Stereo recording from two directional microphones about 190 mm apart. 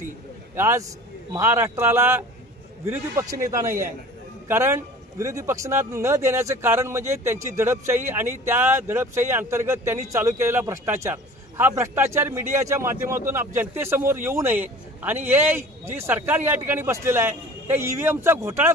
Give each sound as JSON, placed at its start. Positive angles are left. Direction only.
{"t": 0.6, "sound": "a man's voice", "side_deg": -15}